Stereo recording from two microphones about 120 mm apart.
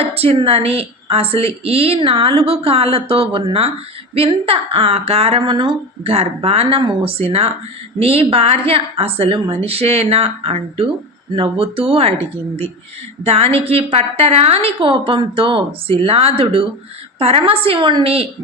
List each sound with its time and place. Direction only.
0.0 s a woman's voice: 55° right (ahead or behind)
13.2 s a woman's voice: 55° right (ahead or behind)